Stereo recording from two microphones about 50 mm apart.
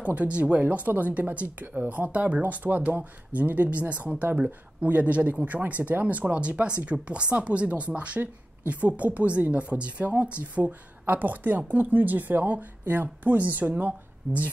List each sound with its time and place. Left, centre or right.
0.0 s speech: right